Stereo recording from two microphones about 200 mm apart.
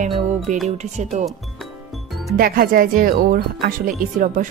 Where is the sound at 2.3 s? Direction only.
45° right (ahead or behind).